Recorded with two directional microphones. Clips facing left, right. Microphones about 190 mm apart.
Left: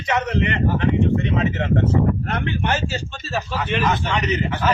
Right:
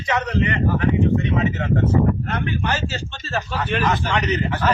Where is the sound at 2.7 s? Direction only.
10° left (ahead or behind).